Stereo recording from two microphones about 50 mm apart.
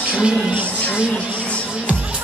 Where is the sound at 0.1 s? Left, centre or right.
Centre.